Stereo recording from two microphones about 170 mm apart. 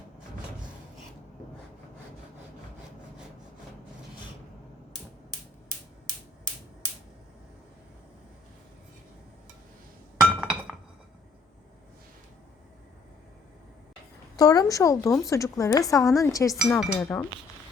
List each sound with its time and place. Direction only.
10.2 s chink: 5° right (ahead or behind)
14.3 s speech: 20° left (ahead or behind)